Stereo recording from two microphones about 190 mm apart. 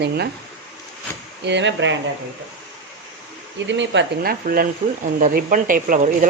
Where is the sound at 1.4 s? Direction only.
70° right (ahead or behind).